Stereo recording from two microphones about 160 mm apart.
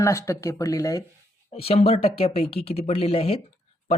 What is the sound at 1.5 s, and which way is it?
Speech, 40° left (ahead or behind).